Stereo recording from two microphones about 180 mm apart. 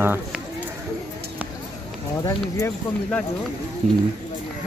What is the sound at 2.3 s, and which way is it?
Speech, 15° left (ahead or behind).